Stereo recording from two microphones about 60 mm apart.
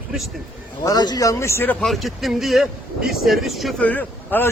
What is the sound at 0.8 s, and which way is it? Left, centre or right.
Speech, left.